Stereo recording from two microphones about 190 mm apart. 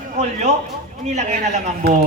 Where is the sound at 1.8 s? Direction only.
60° right (ahead or behind).